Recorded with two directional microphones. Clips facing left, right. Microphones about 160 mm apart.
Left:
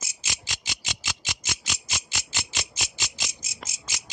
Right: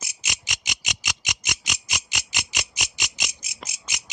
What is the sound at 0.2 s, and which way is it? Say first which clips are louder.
Insect: right 2 dB; 20° right (ahead or behind).